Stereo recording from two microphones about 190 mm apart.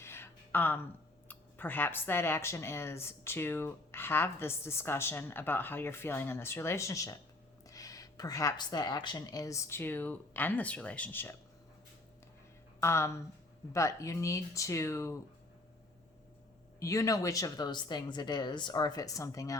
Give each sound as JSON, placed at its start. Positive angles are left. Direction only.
{"t": 0.0, "sound": "a sound", "side_deg": 10}
{"t": 1.3, "sound": "speech", "side_deg": 10}
{"t": 12.8, "sound": "speech", "side_deg": 15}
{"t": 16.8, "sound": "speech", "side_deg": 15}